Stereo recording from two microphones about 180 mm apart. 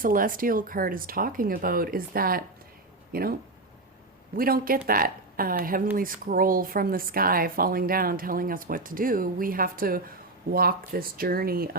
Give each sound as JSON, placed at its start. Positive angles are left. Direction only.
{"t": 0.0, "sound": "speech", "side_deg": -50}
{"t": 4.4, "sound": "speech", "side_deg": -55}